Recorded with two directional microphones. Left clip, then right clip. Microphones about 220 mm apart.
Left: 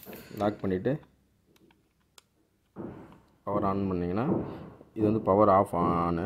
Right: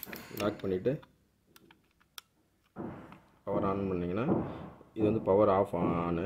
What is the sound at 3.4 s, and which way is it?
A man's voice, 35° left (ahead or behind).